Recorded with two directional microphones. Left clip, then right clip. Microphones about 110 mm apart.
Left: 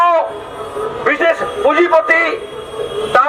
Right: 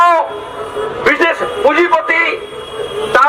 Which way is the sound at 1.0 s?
30° right (ahead or behind).